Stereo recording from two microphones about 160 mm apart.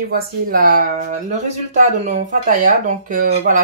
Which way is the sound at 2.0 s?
50° right (ahead or behind).